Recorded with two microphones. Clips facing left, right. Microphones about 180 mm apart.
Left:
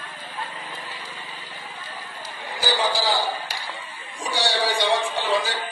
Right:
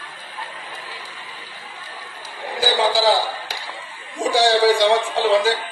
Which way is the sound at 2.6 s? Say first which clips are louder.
Right 5 dB; 90° right.